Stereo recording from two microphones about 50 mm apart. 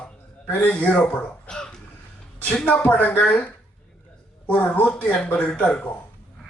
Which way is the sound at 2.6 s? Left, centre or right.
Left.